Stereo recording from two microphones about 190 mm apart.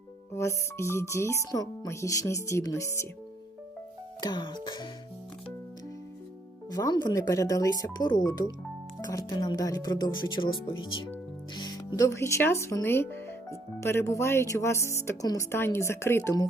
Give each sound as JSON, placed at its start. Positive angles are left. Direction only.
{"t": 0.3, "sound": "speech", "side_deg": 15}
{"t": 4.2, "sound": "speech", "side_deg": 20}
{"t": 6.7, "sound": "speech", "side_deg": 20}